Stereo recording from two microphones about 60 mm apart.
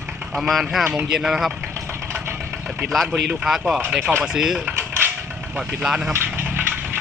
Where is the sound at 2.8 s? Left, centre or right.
Centre.